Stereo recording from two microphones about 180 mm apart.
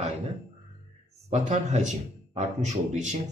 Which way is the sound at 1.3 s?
40° right (ahead or behind).